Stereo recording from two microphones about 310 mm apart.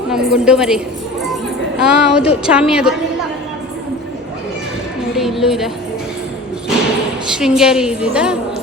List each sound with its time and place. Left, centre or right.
0.1 s a woman's voice: centre
1.8 s a woman's voice: centre
5.1 s a woman's voice: centre
7.3 s a woman's voice: centre